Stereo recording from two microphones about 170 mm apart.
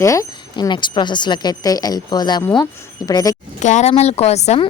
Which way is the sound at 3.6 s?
45° left (ahead or behind).